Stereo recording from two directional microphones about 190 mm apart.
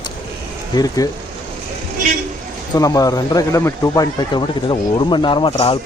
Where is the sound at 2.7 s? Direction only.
20° left (ahead or behind).